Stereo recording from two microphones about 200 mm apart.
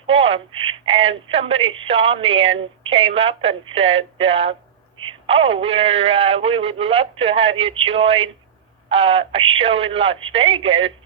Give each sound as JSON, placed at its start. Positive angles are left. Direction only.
{"t": 0.1, "sound": "speech", "side_deg": -30}